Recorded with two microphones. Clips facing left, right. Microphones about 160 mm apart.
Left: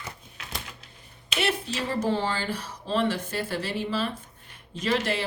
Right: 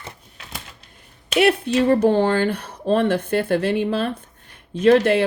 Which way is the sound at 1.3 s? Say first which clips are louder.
Right 11 dB; 60° right (ahead or behind).